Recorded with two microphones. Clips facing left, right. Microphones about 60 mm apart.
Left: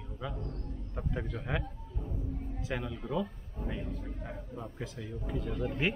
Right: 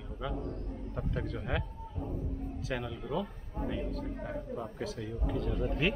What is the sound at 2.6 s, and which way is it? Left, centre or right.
Speech, centre.